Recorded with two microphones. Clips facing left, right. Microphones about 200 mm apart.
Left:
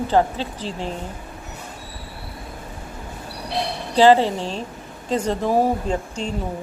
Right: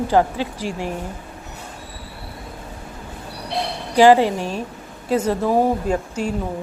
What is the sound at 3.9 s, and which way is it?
A woman's voice, 15° right (ahead or behind).